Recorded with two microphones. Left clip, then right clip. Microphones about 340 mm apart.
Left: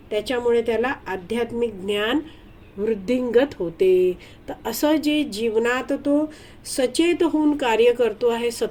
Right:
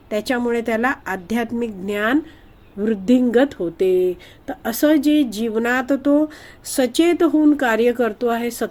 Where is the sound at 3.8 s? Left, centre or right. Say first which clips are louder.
Even; right.